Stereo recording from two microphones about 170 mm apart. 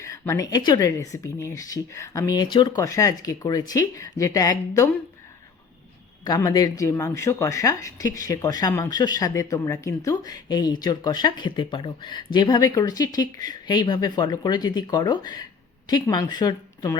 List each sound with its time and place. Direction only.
0.0 s speech: 20° left (ahead or behind)
6.2 s speech: 25° left (ahead or behind)